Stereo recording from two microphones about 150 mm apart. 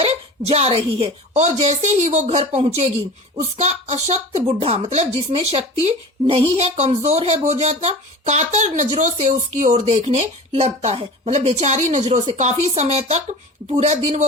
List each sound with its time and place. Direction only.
0.0 s speech: 45° right (ahead or behind)